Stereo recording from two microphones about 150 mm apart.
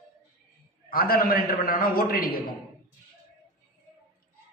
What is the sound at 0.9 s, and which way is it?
A man's voice, 75° left (ahead or behind).